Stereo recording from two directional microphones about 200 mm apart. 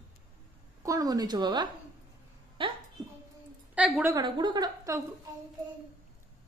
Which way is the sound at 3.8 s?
5° right (ahead or behind).